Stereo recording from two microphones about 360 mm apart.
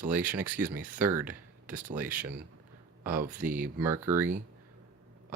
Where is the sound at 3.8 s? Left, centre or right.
Centre.